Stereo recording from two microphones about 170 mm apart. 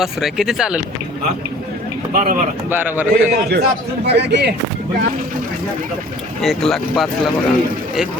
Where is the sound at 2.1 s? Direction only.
55° right (ahead or behind).